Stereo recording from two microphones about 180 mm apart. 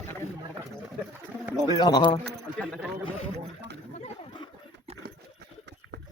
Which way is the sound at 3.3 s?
70° right (ahead or behind).